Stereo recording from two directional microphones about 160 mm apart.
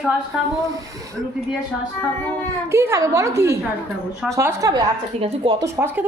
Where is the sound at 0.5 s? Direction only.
20° right (ahead or behind).